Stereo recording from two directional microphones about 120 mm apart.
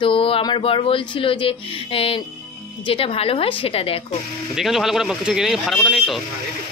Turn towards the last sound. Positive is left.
turn(degrees=0)  # may be behind; listen again after turning